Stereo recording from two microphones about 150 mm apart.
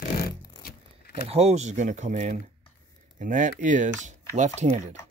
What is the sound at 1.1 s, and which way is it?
Speech, 45° right (ahead or behind).